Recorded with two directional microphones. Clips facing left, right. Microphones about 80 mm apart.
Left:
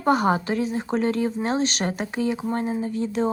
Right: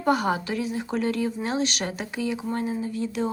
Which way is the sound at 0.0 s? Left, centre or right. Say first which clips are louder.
Left 3 dB; left.